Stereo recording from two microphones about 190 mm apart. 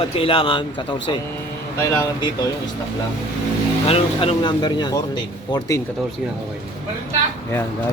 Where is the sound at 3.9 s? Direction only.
30° left (ahead or behind).